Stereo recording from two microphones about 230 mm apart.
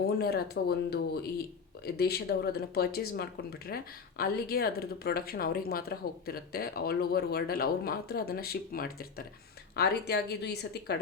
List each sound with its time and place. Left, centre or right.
0.5 s speech: left